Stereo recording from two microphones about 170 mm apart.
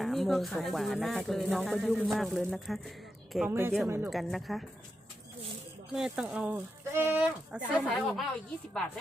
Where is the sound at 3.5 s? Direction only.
15° right (ahead or behind).